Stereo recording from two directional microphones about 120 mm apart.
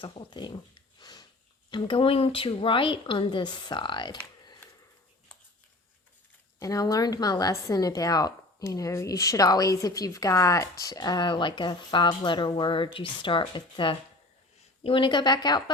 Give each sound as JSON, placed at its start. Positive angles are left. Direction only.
{"t": 0.0, "sound": "a sound", "side_deg": 45}
{"t": 1.7, "sound": "a woman's voice", "side_deg": 45}
{"t": 6.6, "sound": "a woman's voice", "side_deg": 30}